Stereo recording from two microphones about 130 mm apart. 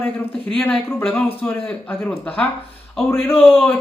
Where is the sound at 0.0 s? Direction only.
15° left (ahead or behind).